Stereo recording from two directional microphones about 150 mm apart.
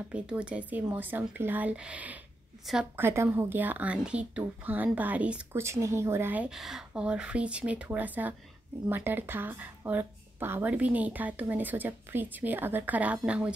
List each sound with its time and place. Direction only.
0.1 s a woman's voice: 10° right (ahead or behind)
3.0 s a woman's voice: 15° right (ahead or behind)